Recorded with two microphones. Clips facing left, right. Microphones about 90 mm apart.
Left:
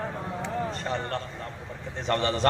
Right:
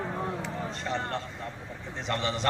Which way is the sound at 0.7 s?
45° left (ahead or behind).